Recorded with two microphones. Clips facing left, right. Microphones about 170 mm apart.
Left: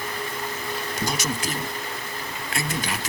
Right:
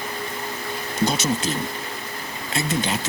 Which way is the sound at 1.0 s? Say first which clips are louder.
Right 7 dB; 25° right (ahead or behind).